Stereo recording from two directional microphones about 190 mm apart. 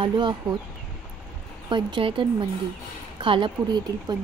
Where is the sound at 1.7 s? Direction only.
25° right (ahead or behind).